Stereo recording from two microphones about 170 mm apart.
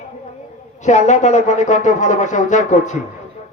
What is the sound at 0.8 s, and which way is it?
Speech, 45° left (ahead or behind).